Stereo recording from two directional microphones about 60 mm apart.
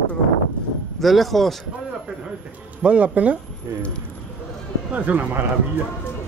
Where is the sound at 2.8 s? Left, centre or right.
Right.